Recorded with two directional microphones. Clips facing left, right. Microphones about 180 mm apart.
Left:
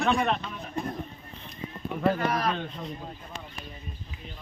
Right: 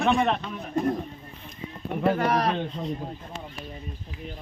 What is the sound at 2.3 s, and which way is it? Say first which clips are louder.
Speech: right 4 dB; 30° right (ahead or behind).